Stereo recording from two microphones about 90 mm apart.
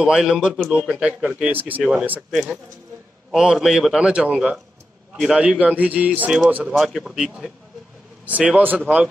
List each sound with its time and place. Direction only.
0.0 s speech: 10° right (ahead or behind)
1.8 s a man's voice: 5° right (ahead or behind)
4.0 s speech: 10° right (ahead or behind)
6.7 s a man's voice: centre (ahead or behind)
8.3 s speech: 15° right (ahead or behind)